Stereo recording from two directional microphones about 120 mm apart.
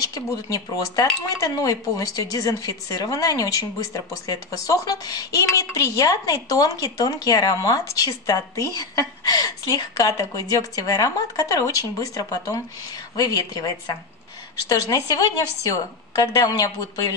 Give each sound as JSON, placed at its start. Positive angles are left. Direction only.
{"t": 0.3, "sound": "a woman's voice", "side_deg": 30}
{"t": 14.7, "sound": "a woman's voice", "side_deg": 30}